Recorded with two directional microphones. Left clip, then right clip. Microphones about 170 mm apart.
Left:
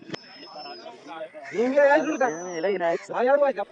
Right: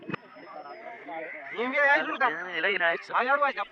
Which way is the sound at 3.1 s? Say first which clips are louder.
Left 6 dB; 60° right (ahead or behind).